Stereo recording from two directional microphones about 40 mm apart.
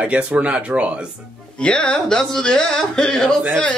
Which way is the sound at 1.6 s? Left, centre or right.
Left.